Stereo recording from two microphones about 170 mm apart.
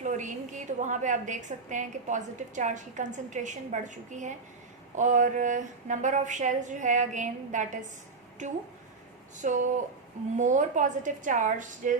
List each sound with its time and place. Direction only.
0.0 s a woman's voice: 45° right (ahead or behind)
9.4 s a woman's voice: 50° right (ahead or behind)